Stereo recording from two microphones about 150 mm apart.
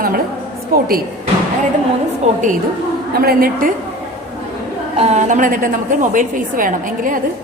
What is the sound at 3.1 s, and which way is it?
Speech, 85° right.